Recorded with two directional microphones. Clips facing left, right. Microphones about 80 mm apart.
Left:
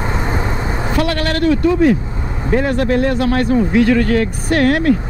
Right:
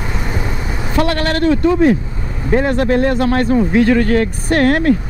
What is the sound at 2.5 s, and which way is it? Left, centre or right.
Speech, right.